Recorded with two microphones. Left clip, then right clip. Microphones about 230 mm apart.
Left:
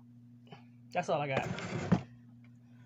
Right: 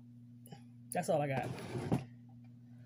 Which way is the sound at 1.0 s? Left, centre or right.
Centre.